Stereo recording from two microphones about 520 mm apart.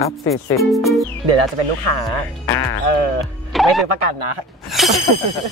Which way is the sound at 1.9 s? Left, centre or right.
Right.